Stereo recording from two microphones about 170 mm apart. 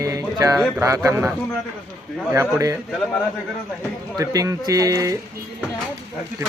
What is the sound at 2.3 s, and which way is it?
Speech, 15° right (ahead or behind).